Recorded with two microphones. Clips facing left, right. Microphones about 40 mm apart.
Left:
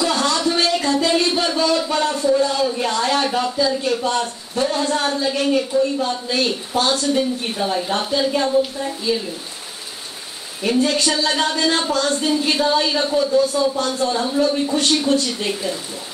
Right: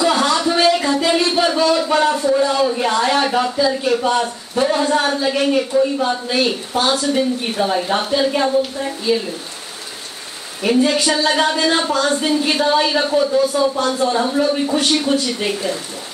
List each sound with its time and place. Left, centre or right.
0.0 s a sound: centre
5.9 s speech: centre
10.6 s speech: centre